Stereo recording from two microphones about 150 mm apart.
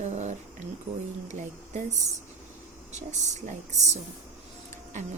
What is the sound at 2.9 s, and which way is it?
A woman's voice, 50° right (ahead or behind).